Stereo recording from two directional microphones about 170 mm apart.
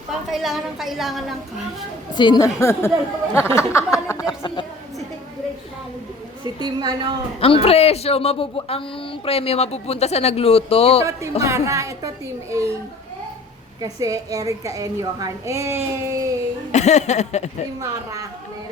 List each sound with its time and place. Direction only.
0.1 s a woman's voice: centre (ahead or behind)
2.1 s a woman's voice: 25° left (ahead or behind)
3.3 s a sound: 15° left (ahead or behind)
3.9 s a woman's voice: 20° left (ahead or behind)
6.4 s a woman's voice: 25° right (ahead or behind)
7.3 s speech: 35° left (ahead or behind)
11.4 s a woman's voice: 15° right (ahead or behind)
13.8 s a woman's voice: 20° right (ahead or behind)
16.7 s speech: 40° left (ahead or behind)
17.7 s a woman's voice: 20° right (ahead or behind)